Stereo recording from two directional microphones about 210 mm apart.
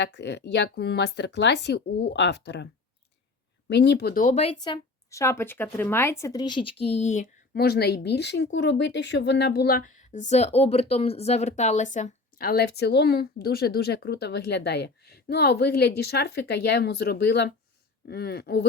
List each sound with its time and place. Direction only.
0.0 s speech: 55° left (ahead or behind)
3.7 s speech: 55° left (ahead or behind); by 4.6 s 35° left (ahead or behind)
4.6 s speech: 15° left (ahead or behind); by 18.6 s 50° left (ahead or behind)